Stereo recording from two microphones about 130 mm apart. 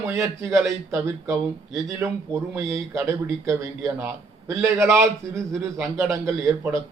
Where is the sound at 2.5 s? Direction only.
20° right (ahead or behind).